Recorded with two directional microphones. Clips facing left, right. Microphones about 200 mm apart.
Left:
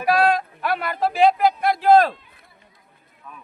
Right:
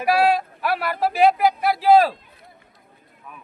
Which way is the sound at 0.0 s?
10° right (ahead or behind).